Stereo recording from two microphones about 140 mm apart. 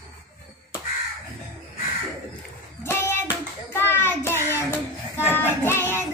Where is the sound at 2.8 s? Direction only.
15° left (ahead or behind).